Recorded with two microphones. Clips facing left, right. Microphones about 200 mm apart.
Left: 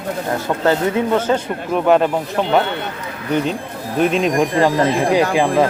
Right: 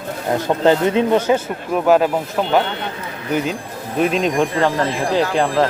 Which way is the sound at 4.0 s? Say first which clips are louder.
Left 1 dB; centre (ahead or behind).